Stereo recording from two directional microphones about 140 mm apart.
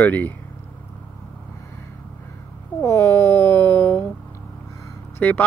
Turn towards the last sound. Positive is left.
turn(degrees=15)  # may be behind; listen again after turning